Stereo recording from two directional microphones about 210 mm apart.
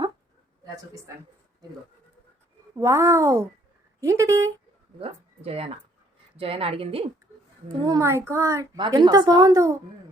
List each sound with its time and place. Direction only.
2.7 s a child's voice: 15° right (ahead or behind)
4.9 s a child's voice: 25° right (ahead or behind)